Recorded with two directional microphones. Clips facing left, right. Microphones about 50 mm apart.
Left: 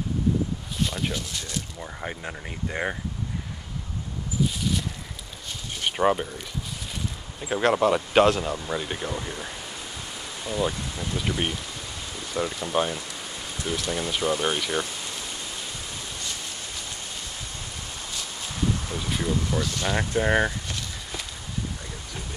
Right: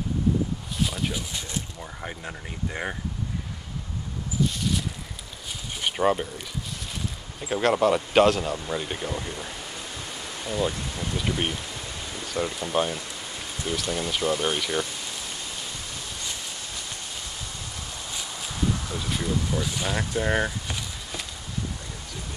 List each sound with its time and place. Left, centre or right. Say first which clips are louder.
0.7 s a sound: even; centre
1.8 s speech: left 2 dB; centre
5.8 s speech: left 1 dB; centre
10.2 s rain: even; centre
11.1 s speech: even; centre
19.0 s a sound: left 2 dB; centre
19.6 s speech: left 1 dB; centre
20.2 s speech: left 3 dB; centre